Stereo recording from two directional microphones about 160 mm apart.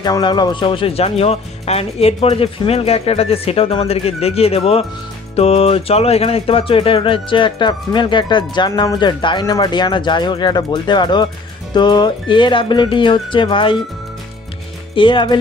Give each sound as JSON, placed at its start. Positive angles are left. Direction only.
{"t": 0.0, "sound": "speech", "side_deg": 25}
{"t": 15.0, "sound": "speech", "side_deg": 30}